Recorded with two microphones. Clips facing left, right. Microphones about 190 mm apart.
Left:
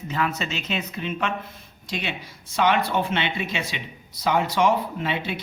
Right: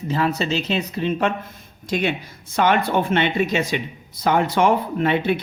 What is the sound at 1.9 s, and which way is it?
Speech, 50° right (ahead or behind).